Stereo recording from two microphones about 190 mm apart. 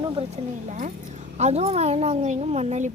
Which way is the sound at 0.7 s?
40° right (ahead or behind).